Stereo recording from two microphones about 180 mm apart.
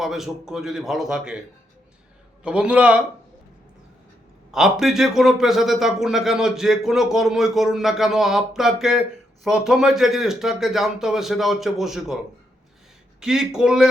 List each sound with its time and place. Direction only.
0.0 s a man's voice: centre (ahead or behind)
2.4 s a man's voice: 5° right (ahead or behind)
4.5 s a man's voice: centre (ahead or behind)